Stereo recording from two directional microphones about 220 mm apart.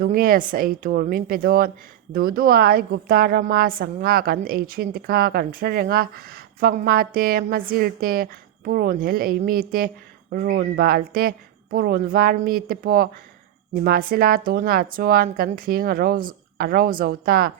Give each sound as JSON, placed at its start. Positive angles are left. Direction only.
{"t": 0.0, "sound": "a woman's voice", "side_deg": -40}